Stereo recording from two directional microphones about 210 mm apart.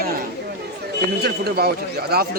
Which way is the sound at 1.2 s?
50° right (ahead or behind).